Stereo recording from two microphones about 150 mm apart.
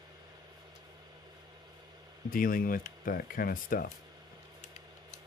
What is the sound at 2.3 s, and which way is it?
Speech, 70° left (ahead or behind).